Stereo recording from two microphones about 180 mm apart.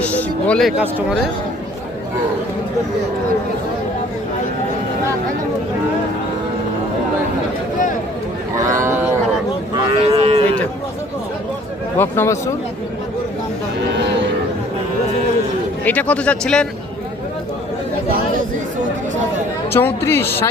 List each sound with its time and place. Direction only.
0.1 s speech: 10° left (ahead or behind)
0.8 s speech: 5° right (ahead or behind)
8.5 s speech: 15° right (ahead or behind)
10.0 s cattle: 35° right (ahead or behind)
11.9 s speech: 15° left (ahead or behind)
15.8 s speech: 10° left (ahead or behind)
19.7 s speech: 15° left (ahead or behind)